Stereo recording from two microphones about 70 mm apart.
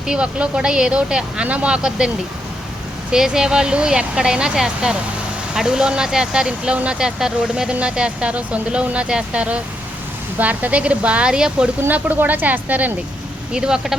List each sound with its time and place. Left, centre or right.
0.1 s speech: centre
3.1 s a woman's voice: centre
11.9 s a woman's voice: right
13.5 s speech: centre